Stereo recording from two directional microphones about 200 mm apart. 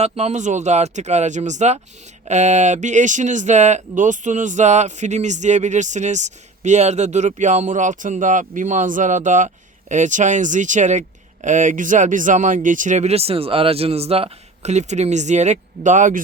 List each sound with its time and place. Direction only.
0.0 s speech: 35° right (ahead or behind)